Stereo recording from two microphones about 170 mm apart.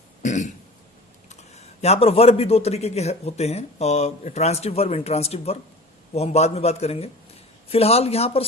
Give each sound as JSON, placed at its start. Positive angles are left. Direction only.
{"t": 0.2, "sound": "throat clearing", "side_deg": 45}
{"t": 1.3, "sound": "a man's voice", "side_deg": 40}